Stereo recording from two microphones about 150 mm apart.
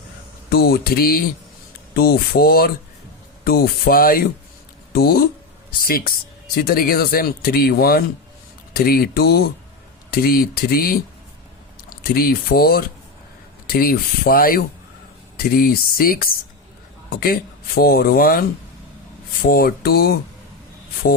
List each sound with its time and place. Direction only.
0.5 s speech: 90° left; by 4.2 s 75° left (ahead or behind)
4.9 s speech: 90° left
13.7 s speech: 80° left
19.5 s speech: 85° left